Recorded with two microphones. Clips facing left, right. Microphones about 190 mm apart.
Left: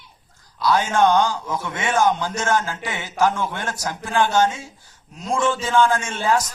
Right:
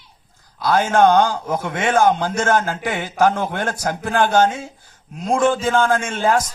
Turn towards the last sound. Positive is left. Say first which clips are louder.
# right 3 dB
turn(degrees=-50)  # may be behind; listen again after turning